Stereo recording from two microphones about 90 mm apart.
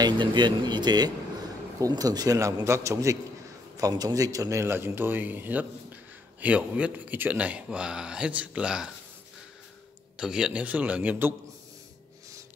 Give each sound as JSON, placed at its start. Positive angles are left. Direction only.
{"t": 0.0, "sound": "a man's voice", "side_deg": -55}
{"t": 10.1, "sound": "speech", "side_deg": -10}